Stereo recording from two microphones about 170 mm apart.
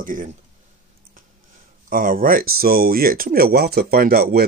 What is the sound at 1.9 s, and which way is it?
Speech, 55° right (ahead or behind).